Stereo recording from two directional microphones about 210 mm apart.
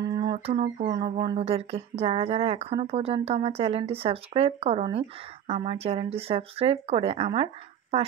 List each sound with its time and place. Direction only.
0.1 s speech: 25° right (ahead or behind)